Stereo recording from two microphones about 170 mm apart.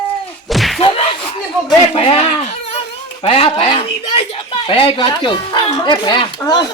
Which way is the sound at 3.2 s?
30° left (ahead or behind).